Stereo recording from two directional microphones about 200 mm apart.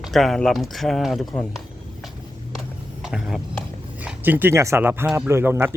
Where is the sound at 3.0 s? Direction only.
5° right (ahead or behind).